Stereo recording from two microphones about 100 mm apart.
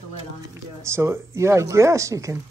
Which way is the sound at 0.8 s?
25° right (ahead or behind).